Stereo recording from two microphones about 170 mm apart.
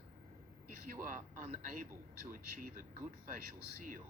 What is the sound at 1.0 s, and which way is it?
Speech, 50° right (ahead or behind).